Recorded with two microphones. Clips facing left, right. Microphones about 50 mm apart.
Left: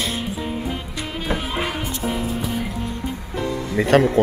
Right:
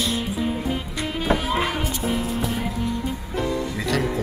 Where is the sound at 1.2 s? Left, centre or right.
Centre.